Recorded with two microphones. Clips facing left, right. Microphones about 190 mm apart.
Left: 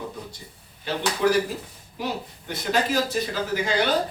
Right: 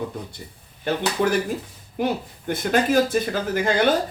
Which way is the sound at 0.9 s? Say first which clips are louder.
Right 1 dB; 50° right (ahead or behind).